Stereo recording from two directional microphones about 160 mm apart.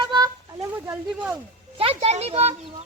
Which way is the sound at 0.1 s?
20° right (ahead or behind).